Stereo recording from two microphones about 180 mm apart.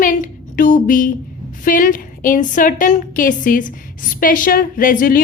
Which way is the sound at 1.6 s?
50° left (ahead or behind).